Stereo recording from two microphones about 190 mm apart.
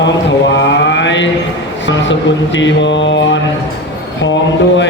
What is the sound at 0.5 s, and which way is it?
Mantra, 70° left (ahead or behind).